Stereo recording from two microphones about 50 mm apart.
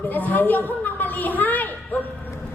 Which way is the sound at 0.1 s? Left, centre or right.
Left.